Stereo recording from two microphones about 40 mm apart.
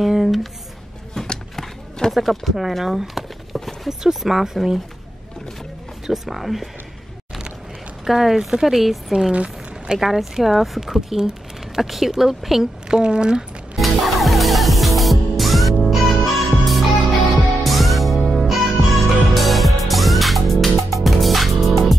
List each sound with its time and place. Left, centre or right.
0.0 s a sound: centre
1.1 s a sound: centre
2.1 s speech: centre
3.5 s clip-clop: centre
4.0 s a woman's voice: centre
6.0 s speech: centre
8.0 s a woman's voice: centre
9.3 s a sound: right
9.9 s a woman's voice: centre
12.8 s speech: right
13.7 s music: centre